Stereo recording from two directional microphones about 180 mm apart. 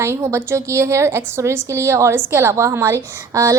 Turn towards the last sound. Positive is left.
turn(degrees=-15)  # may be behind; listen again after turning